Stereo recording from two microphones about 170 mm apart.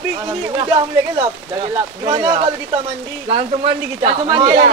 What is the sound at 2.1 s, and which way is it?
Speech, 25° right (ahead or behind).